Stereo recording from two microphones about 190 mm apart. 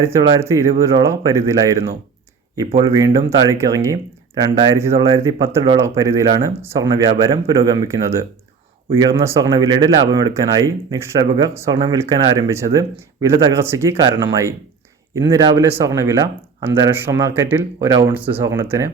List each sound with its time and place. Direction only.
0.0 s speech: 15° right (ahead or behind)